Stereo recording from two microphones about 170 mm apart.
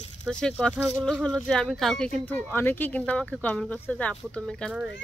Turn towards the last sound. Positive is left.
turn(degrees=5)  # may be behind; listen again after turning